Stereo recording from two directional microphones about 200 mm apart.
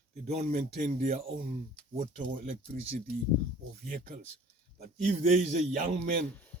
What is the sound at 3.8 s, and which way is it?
Speech, 45° right (ahead or behind).